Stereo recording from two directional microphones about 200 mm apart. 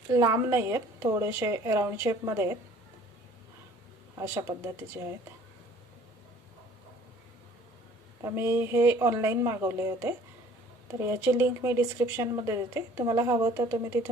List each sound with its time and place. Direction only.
0.1 s speech: 15° right (ahead or behind)
4.2 s speech: 15° right (ahead or behind)
8.2 s speech: 10° right (ahead or behind)